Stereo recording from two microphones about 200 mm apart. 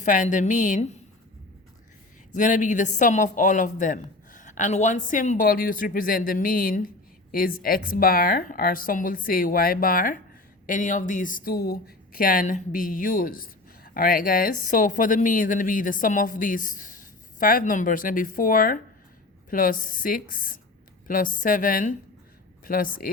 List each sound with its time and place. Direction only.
0.0 s a woman's voice: 40° left (ahead or behind)
2.3 s a woman's voice: 40° left (ahead or behind)